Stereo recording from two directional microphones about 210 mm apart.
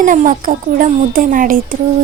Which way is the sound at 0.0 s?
40° right (ahead or behind).